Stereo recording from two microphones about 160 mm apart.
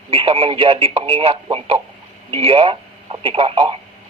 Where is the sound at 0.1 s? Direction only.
35° right (ahead or behind).